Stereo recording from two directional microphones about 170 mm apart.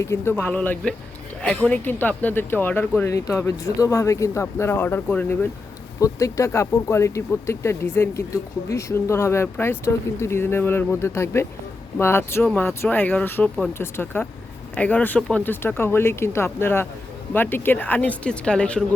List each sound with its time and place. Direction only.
0.0 s speech: 15° left (ahead or behind)